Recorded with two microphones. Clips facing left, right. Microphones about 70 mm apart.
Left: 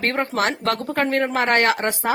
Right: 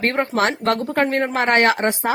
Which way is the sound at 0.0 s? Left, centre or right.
Right.